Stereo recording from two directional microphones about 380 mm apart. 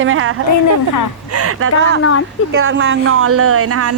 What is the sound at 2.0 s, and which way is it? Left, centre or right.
Speech, left.